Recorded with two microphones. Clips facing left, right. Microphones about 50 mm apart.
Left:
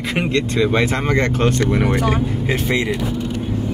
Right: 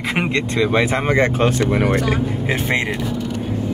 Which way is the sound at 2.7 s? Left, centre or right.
Right.